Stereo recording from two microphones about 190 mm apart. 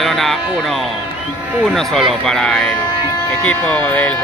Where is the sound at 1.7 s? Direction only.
Centre (ahead or behind).